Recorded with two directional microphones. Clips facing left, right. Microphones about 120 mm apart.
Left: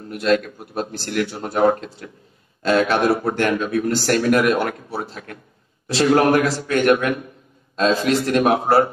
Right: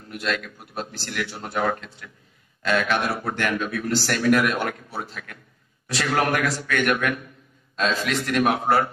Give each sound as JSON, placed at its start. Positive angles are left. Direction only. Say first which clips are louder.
{"t": 0.1, "sound": "speech", "louder": "left 9 dB", "side_deg": 40}